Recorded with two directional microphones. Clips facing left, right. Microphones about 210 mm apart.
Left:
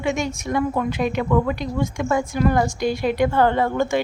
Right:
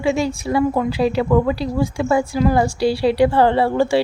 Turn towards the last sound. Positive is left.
turn(degrees=-30)  # may be behind; listen again after turning